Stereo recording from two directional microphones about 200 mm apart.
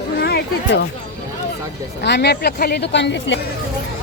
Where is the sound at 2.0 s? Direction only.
55° left (ahead or behind).